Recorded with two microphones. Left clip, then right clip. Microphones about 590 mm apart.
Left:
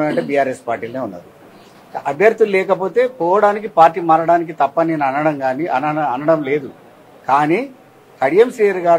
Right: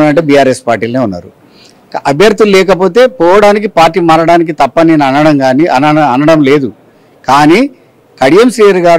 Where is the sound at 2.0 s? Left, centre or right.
Right.